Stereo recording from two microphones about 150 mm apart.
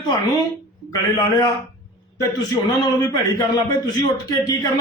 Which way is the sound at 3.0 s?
25° left (ahead or behind).